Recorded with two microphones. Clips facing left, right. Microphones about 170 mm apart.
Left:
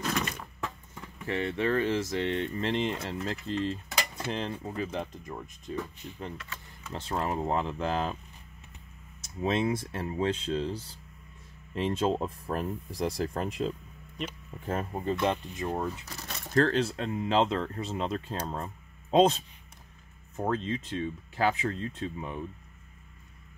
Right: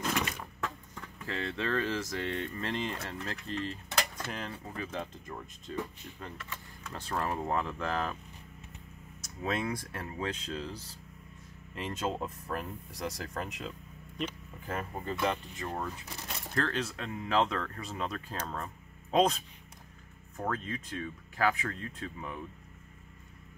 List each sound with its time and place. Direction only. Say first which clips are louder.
0.1 s a sound: left 1 dB; 5° right (ahead or behind)
0.6 s speech: even; 15° left (ahead or behind)
4.0 s cutlery: left 1 dB; 5° left (ahead or behind)
4.3 s speech: left 6 dB; 25° left (ahead or behind)
9.2 s speech: left 5 dB; 25° left (ahead or behind)
15.2 s speech: left 4 dB; 20° left (ahead or behind)
16.5 s speech: left 8 dB; 35° left (ahead or behind)